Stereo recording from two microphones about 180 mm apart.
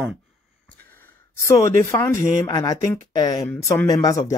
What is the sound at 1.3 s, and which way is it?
Speech, 15° left (ahead or behind).